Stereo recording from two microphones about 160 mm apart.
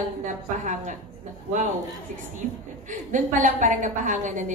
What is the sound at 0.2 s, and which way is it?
Speech, 50° right (ahead or behind).